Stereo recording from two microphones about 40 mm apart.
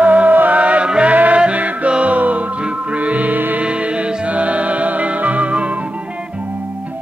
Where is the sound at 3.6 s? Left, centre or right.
Right.